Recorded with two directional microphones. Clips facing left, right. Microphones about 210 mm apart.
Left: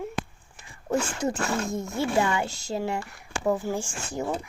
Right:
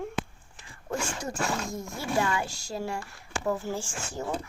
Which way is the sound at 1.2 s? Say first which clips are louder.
Left 4 dB; 20° left (ahead or behind).